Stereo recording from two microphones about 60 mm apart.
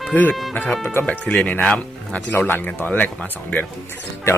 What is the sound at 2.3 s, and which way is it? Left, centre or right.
Speech, left.